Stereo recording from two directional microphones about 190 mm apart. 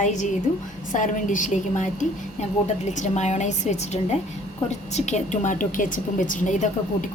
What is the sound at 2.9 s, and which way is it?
A woman's voice, 40° left (ahead or behind).